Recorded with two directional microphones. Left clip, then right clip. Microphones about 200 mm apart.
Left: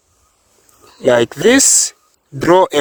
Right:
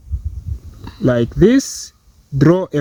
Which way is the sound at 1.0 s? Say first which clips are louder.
Left 3 dB; 65° left (ahead or behind).